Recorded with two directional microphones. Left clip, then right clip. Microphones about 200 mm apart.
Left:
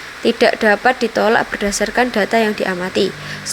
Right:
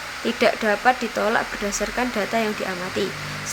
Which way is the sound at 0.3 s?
30° left (ahead or behind).